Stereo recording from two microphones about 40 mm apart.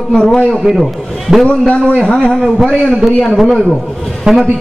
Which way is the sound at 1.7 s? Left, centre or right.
Left.